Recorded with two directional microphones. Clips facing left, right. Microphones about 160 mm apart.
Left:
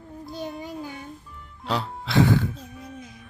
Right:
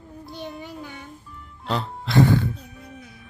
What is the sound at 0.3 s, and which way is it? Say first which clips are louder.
Music: left 2 dB; centre (ahead or behind).